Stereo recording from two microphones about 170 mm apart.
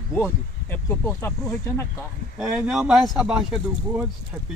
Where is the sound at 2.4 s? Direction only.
5° right (ahead or behind).